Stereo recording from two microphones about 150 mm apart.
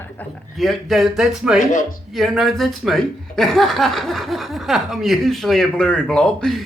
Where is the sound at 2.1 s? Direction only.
Centre (ahead or behind).